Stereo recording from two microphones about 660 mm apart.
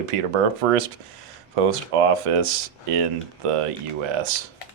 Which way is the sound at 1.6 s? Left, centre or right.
Right.